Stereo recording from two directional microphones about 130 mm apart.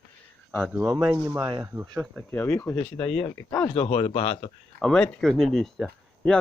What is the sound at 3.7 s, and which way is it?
Speech, 45° left (ahead or behind).